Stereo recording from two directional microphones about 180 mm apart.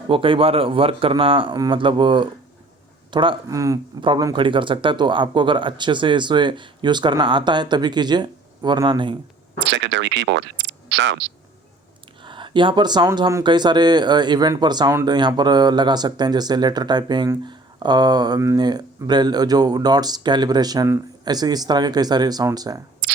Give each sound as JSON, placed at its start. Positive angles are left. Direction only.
{"t": 0.1, "sound": "speech", "side_deg": -30}
{"t": 9.6, "sound": "speech", "side_deg": -85}
{"t": 12.2, "sound": "speech", "side_deg": -25}